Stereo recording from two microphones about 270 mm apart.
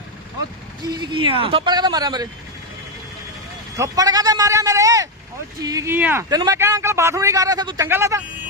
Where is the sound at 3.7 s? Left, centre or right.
Centre.